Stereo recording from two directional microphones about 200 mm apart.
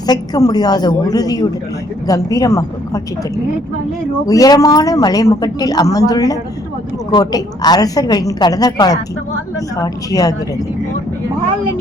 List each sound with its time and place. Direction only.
0.1 s a woman's voice: 20° left (ahead or behind)